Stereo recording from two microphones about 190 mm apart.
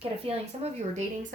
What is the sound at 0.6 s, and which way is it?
Speech, 35° right (ahead or behind).